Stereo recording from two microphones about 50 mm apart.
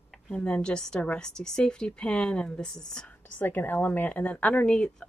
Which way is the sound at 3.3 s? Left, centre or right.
Left.